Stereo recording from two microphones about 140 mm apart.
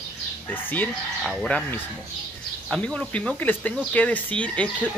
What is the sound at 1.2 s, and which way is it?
Speech, 5° left (ahead or behind).